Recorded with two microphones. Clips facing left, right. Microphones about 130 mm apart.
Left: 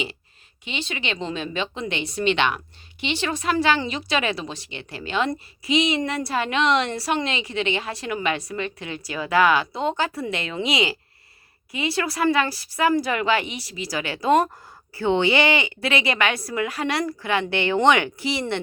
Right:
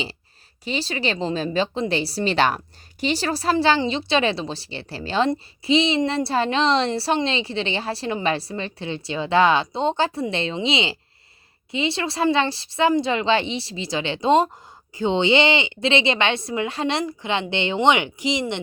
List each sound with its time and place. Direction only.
0.6 s a woman's voice: 35° right (ahead or behind); by 18.6 s 20° right (ahead or behind)